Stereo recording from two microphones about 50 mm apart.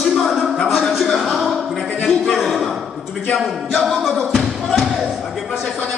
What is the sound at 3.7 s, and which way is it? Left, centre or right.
Music, centre.